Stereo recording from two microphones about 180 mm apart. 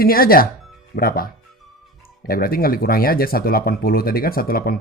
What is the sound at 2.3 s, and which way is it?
Speech, 55° left (ahead or behind).